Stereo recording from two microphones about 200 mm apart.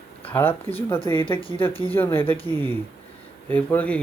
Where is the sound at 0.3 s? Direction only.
10° left (ahead or behind).